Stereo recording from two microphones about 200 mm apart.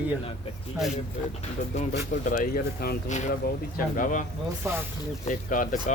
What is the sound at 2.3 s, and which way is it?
Speech, 45° left (ahead or behind).